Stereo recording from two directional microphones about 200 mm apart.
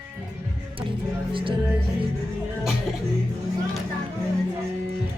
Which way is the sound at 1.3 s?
25° right (ahead or behind).